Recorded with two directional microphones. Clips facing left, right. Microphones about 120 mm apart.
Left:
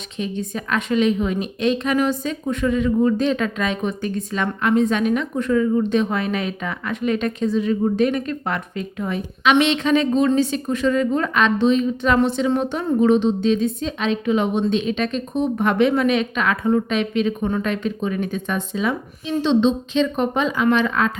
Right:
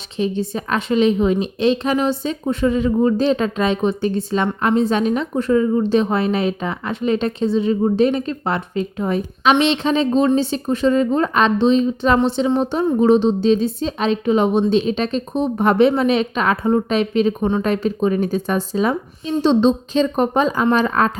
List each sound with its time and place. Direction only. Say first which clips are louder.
0.2 s a woman's voice: right 5 dB; 30° right (ahead or behind)